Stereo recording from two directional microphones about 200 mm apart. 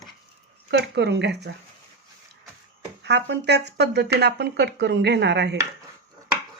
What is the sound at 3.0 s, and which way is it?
Speech, 60° right (ahead or behind).